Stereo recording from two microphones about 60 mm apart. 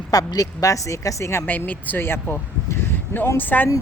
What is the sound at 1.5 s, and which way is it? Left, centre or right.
Speech, left.